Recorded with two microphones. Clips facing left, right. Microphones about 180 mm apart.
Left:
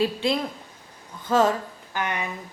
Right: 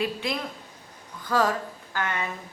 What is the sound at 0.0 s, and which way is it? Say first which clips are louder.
Speech: left 5 dB; 30° left (ahead or behind).